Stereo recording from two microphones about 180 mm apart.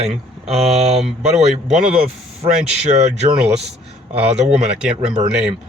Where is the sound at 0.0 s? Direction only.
35° right (ahead or behind).